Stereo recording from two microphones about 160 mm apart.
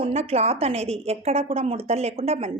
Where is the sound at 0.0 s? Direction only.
40° right (ahead or behind).